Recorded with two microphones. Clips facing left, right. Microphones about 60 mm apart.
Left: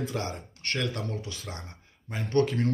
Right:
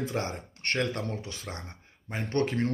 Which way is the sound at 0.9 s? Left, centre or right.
Right.